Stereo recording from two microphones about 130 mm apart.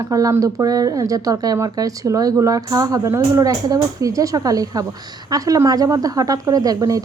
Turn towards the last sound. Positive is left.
turn(degrees=-25)  # may be behind; listen again after turning